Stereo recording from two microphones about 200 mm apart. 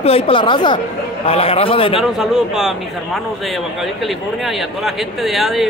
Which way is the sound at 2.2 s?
Centre (ahead or behind).